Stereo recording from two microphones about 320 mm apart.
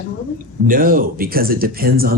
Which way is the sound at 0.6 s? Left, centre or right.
Right.